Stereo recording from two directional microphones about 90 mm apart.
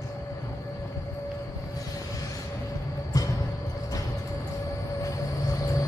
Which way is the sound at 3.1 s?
40° left (ahead or behind).